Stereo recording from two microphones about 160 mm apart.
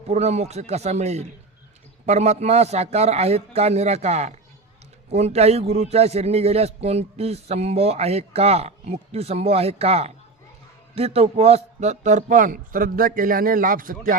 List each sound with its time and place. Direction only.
0.1 s a man's voice: 45° right (ahead or behind); by 14.2 s 60° right (ahead or behind)